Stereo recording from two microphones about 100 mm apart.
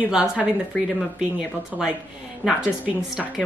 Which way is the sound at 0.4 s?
5° right (ahead or behind).